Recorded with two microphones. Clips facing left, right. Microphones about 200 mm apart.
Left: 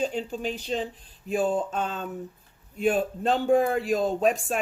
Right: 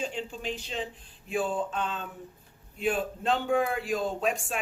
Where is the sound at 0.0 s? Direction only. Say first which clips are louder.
Left 6 dB; 40° left (ahead or behind).